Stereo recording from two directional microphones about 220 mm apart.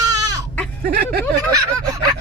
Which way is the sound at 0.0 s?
15° right (ahead or behind).